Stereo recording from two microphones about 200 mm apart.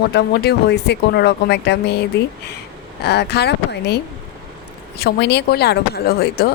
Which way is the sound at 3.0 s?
55° left (ahead or behind).